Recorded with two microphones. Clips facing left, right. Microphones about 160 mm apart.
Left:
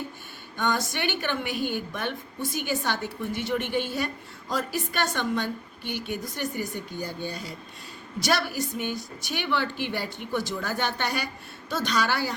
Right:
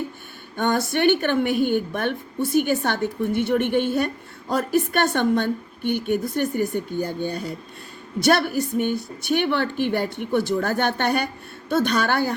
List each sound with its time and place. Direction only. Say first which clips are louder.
0.5 s a woman's voice: right 6 dB; 55° right (ahead or behind)